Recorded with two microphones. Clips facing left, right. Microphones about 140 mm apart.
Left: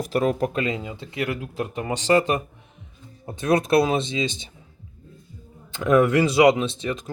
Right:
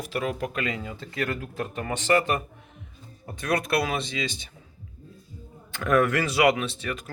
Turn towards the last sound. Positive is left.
turn(degrees=20)  # may be behind; listen again after turning